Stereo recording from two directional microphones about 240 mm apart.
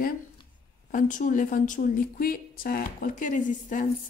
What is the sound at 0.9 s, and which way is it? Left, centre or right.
Speech, left.